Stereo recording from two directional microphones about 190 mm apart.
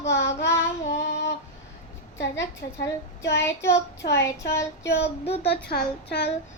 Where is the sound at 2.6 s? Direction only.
55° left (ahead or behind).